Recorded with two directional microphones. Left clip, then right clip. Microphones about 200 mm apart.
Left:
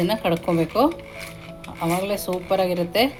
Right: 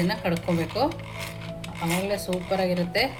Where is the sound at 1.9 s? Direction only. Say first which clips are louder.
Left 3 dB; 40° left (ahead or behind).